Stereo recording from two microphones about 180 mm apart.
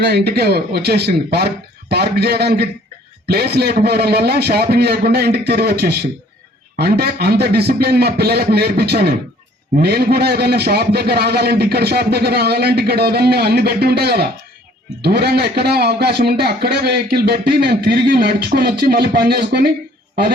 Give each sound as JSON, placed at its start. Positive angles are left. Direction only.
{"t": 0.0, "sound": "a man's voice", "side_deg": -65}